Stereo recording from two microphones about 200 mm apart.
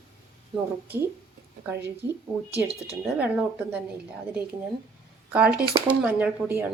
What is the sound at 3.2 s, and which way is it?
Speech, 5° right (ahead or behind).